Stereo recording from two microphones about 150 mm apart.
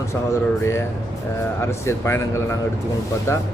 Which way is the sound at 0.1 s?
20° left (ahead or behind).